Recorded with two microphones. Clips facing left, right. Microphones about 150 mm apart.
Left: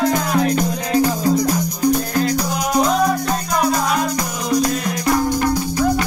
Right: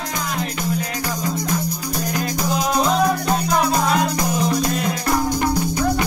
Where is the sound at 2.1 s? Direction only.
20° right (ahead or behind).